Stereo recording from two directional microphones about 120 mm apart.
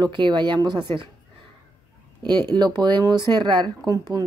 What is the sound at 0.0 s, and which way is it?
Speech, 40° right (ahead or behind).